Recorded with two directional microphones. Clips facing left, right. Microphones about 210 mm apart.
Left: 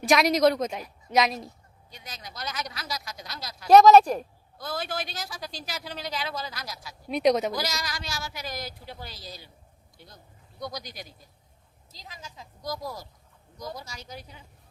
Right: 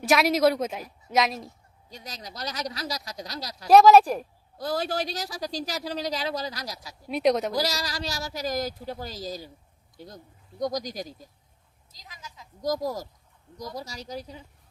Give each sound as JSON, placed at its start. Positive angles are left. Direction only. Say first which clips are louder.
{"t": 0.1, "sound": "a woman's voice", "louder": "even", "side_deg": -5}
{"t": 1.9, "sound": "speech", "louder": "right 3 dB", "side_deg": -40}
{"t": 3.7, "sound": "a woman's voice", "louder": "even", "side_deg": -5}
{"t": 4.5, "sound": "speech", "louder": "right 5 dB", "side_deg": -40}
{"t": 7.1, "sound": "a woman's voice", "louder": "even", "side_deg": 0}
{"t": 7.5, "sound": "speech", "louder": "right 4 dB", "side_deg": -35}
{"t": 11.9, "sound": "a sound", "louder": "left 2 dB", "side_deg": 30}
{"t": 12.6, "sound": "speech", "louder": "right 7 dB", "side_deg": -40}